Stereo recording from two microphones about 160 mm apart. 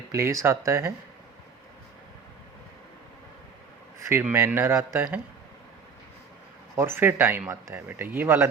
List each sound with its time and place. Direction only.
0.1 s speech: 20° right (ahead or behind)
4.1 s speech: 15° right (ahead or behind)
6.7 s speech: 15° right (ahead or behind)